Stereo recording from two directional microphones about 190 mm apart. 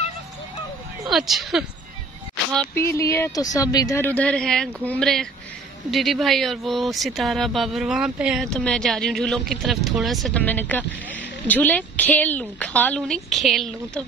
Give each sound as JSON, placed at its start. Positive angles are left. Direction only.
{"t": 1.1, "sound": "speech", "side_deg": 0}
{"t": 2.5, "sound": "a woman's voice", "side_deg": 10}